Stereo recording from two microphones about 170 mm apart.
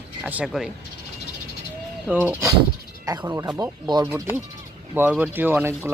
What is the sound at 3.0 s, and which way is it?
Speech, 20° right (ahead or behind).